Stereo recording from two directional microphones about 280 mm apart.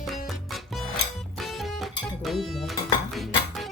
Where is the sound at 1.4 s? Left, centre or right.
Centre.